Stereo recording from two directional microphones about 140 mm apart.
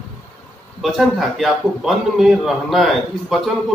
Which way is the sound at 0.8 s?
Centre (ahead or behind).